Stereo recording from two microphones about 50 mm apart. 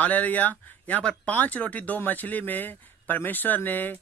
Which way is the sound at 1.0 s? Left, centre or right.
Left.